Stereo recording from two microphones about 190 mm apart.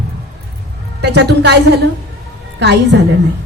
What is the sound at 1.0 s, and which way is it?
Speech, 65° right (ahead or behind).